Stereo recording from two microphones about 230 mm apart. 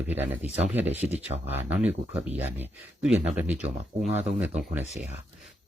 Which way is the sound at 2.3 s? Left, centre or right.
Right.